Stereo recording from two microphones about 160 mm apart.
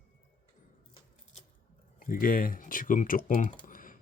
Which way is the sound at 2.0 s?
60° left (ahead or behind).